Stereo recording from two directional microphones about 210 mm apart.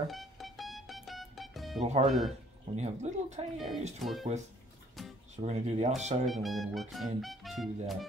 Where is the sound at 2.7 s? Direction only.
30° right (ahead or behind).